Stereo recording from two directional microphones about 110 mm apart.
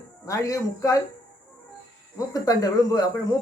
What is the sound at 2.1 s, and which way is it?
Speech, 35° left (ahead or behind).